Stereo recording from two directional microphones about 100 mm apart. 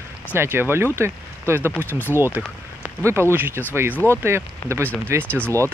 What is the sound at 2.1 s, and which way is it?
Speech, 20° right (ahead or behind).